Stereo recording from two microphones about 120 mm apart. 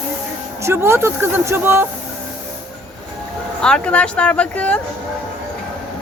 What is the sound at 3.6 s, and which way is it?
Speech, 5° left (ahead or behind).